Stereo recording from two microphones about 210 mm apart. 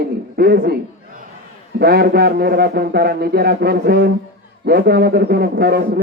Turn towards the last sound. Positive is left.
turn(degrees=-50)  # may be behind; listen again after turning